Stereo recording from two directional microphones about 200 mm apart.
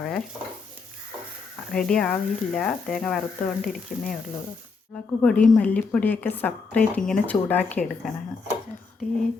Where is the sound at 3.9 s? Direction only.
45° left (ahead or behind).